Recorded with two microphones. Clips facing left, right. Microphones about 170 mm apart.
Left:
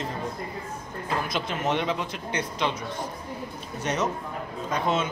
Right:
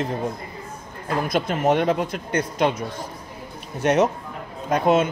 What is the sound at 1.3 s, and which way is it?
A man's voice, 50° right (ahead or behind).